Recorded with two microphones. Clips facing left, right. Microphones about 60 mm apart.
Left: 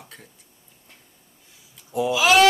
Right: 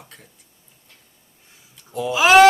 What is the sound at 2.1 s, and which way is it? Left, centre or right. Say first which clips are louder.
Speech: right 5 dB; right.